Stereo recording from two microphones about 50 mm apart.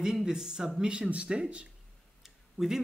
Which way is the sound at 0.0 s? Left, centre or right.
Centre.